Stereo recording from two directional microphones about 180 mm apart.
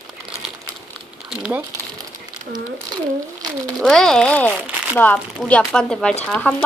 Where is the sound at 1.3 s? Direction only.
5° right (ahead or behind).